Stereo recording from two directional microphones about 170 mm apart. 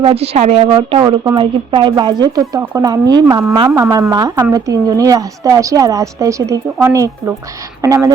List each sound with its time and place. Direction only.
0.0 s a woman's voice: 35° right (ahead or behind); by 8.1 s 20° right (ahead or behind)